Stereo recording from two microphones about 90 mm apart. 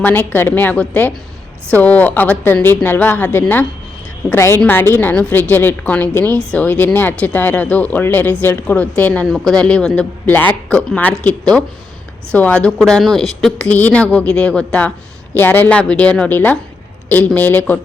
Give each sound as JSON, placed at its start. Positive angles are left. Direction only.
{"t": 0.0, "sound": "speech", "side_deg": 20}
{"t": 9.2, "sound": "speech", "side_deg": 5}
{"t": 13.7, "sound": "speech", "side_deg": 15}